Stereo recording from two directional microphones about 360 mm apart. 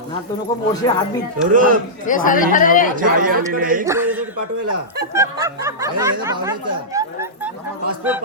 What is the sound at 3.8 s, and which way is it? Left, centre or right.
Speech, centre.